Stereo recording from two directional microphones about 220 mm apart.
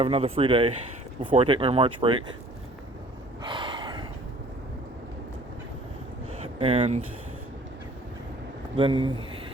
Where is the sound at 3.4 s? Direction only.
20° right (ahead or behind).